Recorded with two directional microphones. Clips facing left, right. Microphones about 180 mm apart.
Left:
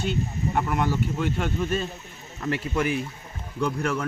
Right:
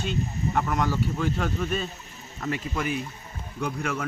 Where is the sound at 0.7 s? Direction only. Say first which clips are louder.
Left 1 dB; 25° left (ahead or behind).